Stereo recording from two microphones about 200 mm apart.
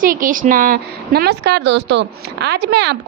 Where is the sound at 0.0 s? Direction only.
45° right (ahead or behind).